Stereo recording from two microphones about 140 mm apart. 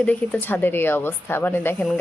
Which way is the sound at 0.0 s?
10° left (ahead or behind).